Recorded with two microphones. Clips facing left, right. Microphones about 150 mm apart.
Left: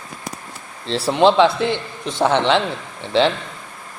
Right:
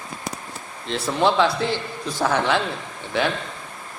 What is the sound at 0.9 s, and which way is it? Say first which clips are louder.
Speech: left 5 dB; 30° left (ahead or behind).